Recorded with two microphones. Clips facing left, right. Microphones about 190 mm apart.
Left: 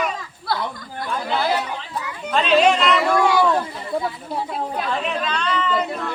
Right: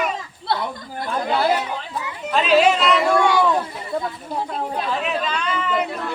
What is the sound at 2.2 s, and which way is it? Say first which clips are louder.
Speech: right 1 dB; centre (ahead or behind).